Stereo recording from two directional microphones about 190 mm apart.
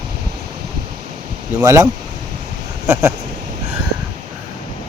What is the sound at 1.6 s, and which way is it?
Speech, 20° right (ahead or behind).